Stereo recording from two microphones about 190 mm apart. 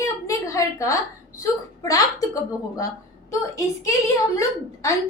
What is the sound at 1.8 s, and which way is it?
A woman's voice, 20° left (ahead or behind).